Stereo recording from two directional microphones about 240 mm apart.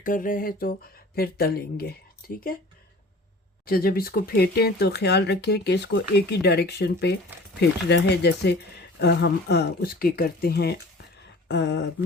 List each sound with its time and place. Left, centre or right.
0.0 s speech: left
3.7 s speech: left